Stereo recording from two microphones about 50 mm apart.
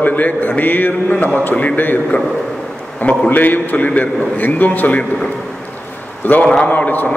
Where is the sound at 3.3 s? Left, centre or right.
Left.